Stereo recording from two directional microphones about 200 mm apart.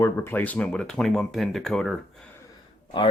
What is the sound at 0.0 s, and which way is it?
Speech, 10° left (ahead or behind).